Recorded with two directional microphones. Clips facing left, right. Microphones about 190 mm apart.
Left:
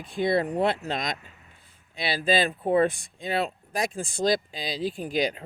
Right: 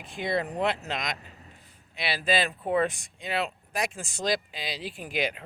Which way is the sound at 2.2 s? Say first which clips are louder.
Left 3 dB; 30° left (ahead or behind).